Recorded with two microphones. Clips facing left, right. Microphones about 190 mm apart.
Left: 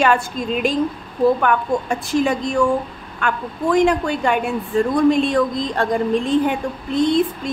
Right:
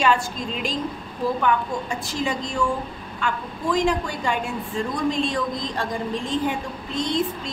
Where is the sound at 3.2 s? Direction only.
60° left (ahead or behind).